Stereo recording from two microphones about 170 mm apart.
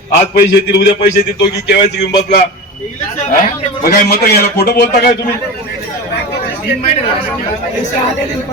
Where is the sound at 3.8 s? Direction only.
70° left (ahead or behind).